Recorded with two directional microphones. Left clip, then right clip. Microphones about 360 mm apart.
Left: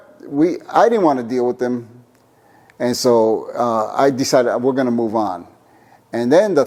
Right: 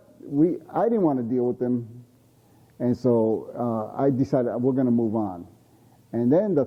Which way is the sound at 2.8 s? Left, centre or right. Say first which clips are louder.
Left 8 dB; centre.